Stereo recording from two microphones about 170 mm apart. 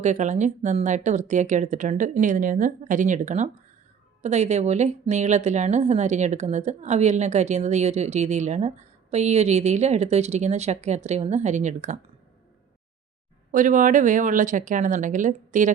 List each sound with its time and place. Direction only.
0.0 s speech: 45° right (ahead or behind)
13.5 s speech: 50° right (ahead or behind)